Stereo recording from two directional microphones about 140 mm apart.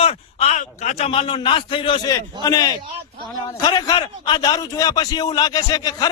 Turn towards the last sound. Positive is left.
turn(degrees=30)  # may be behind; listen again after turning